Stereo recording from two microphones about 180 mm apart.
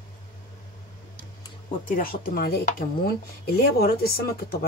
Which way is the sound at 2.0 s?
55° left (ahead or behind).